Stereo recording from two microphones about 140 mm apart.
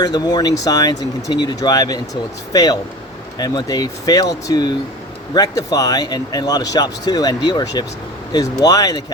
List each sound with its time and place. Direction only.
0.0 s speech: 30° left (ahead or behind)